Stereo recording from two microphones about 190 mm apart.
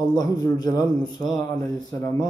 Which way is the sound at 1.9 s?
15° left (ahead or behind).